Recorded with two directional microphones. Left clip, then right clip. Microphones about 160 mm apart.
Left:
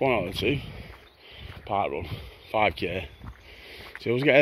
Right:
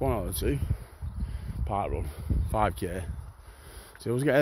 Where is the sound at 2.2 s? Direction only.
40° right (ahead or behind).